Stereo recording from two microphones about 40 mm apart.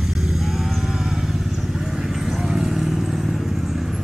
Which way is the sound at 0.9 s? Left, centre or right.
Centre.